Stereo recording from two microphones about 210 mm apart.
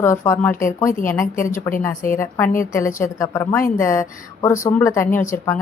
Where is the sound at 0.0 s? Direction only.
10° left (ahead or behind).